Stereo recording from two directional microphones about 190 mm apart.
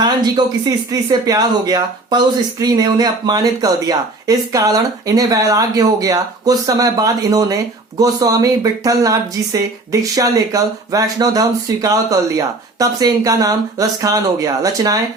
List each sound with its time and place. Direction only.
0.0 s speech: 20° right (ahead or behind)